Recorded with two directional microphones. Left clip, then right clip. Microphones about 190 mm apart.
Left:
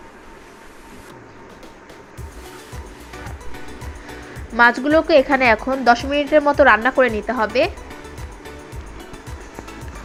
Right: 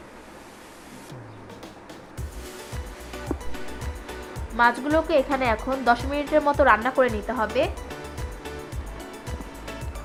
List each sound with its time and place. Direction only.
4.5 s speech: 20° left (ahead or behind)